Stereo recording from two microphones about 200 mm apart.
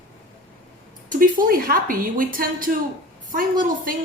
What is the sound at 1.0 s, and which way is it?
A woman's voice, 45° right (ahead or behind).